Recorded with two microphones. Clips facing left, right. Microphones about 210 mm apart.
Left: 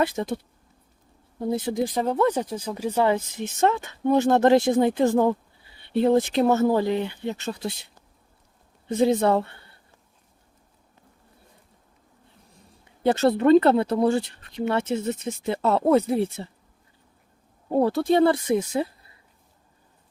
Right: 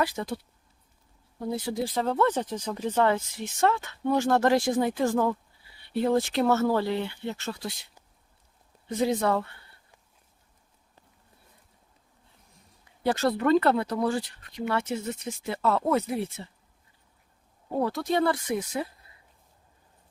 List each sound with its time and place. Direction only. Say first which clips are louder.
0.0 s speech: left 4 dB; 20° left (ahead or behind)
1.4 s speech: left 5 dB; 20° left (ahead or behind)
8.9 s speech: left 5 dB; 25° left (ahead or behind)
13.0 s speech: left 5 dB; 25° left (ahead or behind)
17.7 s speech: left 7 dB; 30° left (ahead or behind)